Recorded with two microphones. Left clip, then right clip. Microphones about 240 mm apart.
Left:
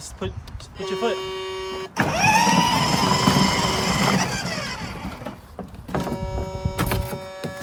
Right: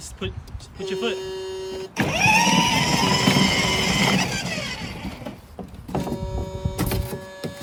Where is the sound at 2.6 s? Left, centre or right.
Left.